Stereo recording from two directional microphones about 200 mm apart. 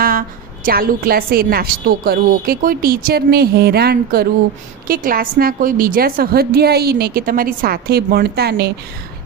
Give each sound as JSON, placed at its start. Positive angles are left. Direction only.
{"t": 0.0, "sound": "a woman's voice", "side_deg": -45}